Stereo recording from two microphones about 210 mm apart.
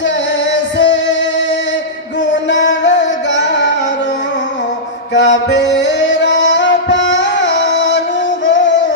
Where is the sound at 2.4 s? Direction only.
55° left (ahead or behind).